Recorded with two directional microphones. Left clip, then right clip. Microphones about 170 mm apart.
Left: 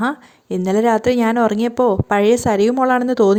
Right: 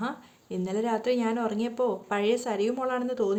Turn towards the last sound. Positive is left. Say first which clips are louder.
# left 13 dB
turn(degrees=50)  # may be behind; listen again after turning